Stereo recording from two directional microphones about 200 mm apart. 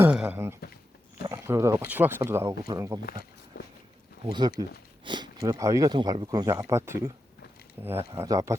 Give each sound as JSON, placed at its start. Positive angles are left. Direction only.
{"t": 0.0, "sound": "a sound", "side_deg": -10}
{"t": 1.3, "sound": "speech", "side_deg": -15}
{"t": 3.0, "sound": "speech", "side_deg": 50}
{"t": 4.2, "sound": "speech", "side_deg": -25}